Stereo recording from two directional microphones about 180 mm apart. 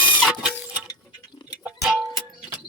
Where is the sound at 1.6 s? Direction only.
Centre (ahead or behind).